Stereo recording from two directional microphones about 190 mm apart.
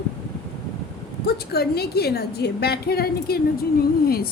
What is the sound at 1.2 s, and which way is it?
A woman's voice, 55° left (ahead or behind).